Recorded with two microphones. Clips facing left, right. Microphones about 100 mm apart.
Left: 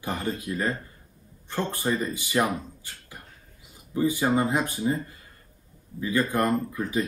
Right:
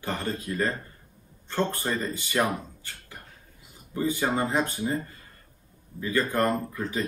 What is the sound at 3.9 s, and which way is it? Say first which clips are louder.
Speech: left 3 dB; 15° left (ahead or behind).